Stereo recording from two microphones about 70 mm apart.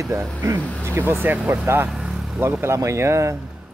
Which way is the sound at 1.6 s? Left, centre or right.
Right.